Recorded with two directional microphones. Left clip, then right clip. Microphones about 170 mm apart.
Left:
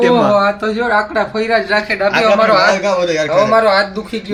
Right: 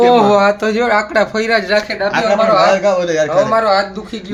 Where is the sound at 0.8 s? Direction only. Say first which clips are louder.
Even; 65° right (ahead or behind).